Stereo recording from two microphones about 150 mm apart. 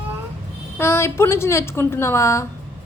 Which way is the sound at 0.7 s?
20° left (ahead or behind).